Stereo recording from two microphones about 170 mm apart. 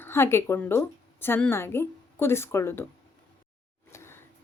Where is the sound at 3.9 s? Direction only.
15° left (ahead or behind).